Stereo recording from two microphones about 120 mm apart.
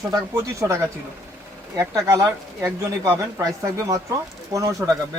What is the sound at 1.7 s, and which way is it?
Speech, 25° right (ahead or behind).